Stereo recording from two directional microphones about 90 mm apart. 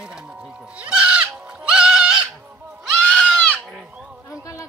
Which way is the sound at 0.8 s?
15° right (ahead or behind).